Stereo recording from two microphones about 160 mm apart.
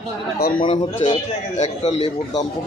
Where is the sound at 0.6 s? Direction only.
30° left (ahead or behind).